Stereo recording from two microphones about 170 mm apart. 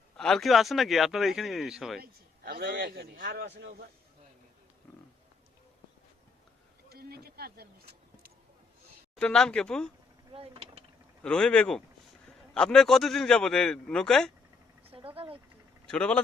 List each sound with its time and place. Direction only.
0.2 s a man's voice: centre (ahead or behind)
2.0 s a man's voice: 65° right (ahead or behind); by 3.8 s 85° right
6.9 s speech: 65° right (ahead or behind)
9.1 s a man's voice: 5° left (ahead or behind)
10.3 s speech: 35° right (ahead or behind)
11.2 s a man's voice: 5° left (ahead or behind)
14.8 s speech: 35° right (ahead or behind)
15.9 s speech: 5° left (ahead or behind)